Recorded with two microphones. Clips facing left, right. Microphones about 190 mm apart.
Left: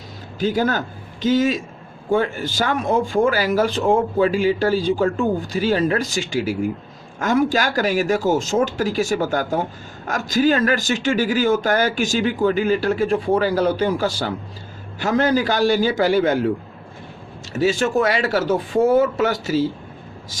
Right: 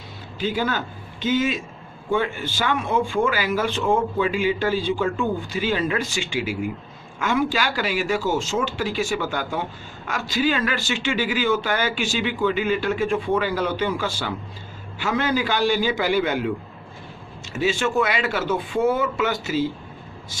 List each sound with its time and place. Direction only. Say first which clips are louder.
0.3 s a man's voice: left 4 dB; 45° left (ahead or behind)
17.5 s speech: left 4 dB; 40° left (ahead or behind)